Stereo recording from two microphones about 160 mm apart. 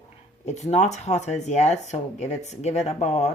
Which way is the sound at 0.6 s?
45° left (ahead or behind).